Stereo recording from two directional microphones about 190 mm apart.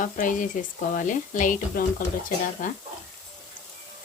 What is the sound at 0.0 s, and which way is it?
Speech, 45° left (ahead or behind).